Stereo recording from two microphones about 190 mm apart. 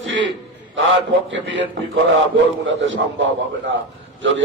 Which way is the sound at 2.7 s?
75° right (ahead or behind).